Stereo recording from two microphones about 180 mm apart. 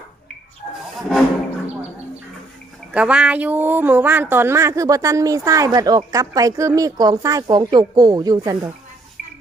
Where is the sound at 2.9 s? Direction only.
5° right (ahead or behind).